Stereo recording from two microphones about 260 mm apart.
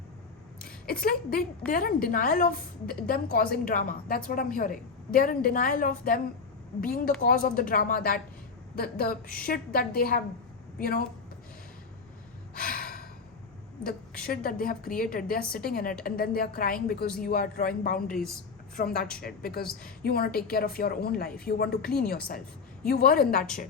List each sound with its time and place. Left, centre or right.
0.9 s a woman's voice: left
12.5 s gasp: left
14.3 s a woman's voice: left
18.1 s speech: centre
18.8 s a woman's voice: left